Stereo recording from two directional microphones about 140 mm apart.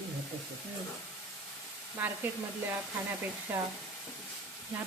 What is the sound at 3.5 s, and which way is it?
Speech, 15° right (ahead or behind).